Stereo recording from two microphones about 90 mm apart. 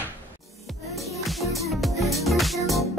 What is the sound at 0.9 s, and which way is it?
Music, centre (ahead or behind).